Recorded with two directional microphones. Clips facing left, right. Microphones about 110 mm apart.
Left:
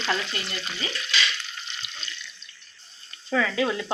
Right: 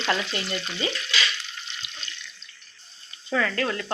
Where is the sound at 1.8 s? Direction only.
50° left (ahead or behind).